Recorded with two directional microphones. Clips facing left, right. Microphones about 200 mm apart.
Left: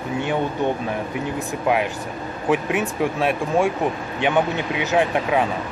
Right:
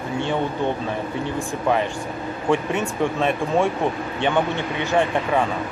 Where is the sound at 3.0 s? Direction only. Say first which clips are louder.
Right 2 dB; 5° left (ahead or behind).